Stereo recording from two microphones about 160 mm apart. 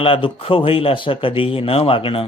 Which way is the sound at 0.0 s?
35° left (ahead or behind).